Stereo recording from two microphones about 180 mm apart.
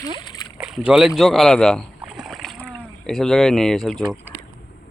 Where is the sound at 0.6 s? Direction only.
5° right (ahead or behind).